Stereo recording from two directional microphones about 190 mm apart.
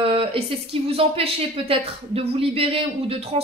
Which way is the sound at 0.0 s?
30° right (ahead or behind).